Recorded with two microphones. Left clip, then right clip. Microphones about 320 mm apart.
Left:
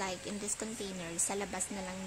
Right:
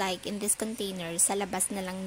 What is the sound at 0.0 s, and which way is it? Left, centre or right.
A woman's voice, right.